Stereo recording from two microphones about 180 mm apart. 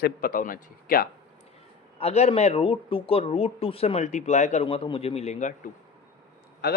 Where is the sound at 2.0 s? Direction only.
35° left (ahead or behind).